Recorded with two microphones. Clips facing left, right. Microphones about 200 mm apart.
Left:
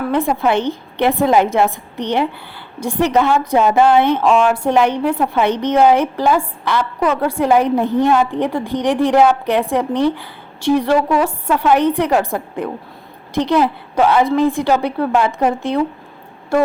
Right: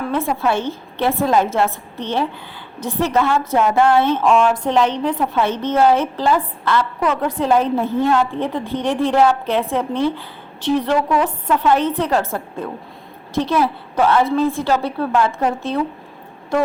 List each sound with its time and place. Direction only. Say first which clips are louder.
0.1 s a woman's voice: left 3 dB; 15° left (ahead or behind)